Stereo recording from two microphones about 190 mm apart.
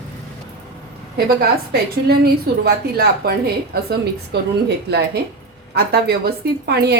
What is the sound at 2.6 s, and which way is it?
A woman's voice, 55° right (ahead or behind).